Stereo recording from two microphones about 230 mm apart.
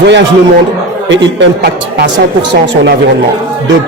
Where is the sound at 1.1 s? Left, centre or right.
Right.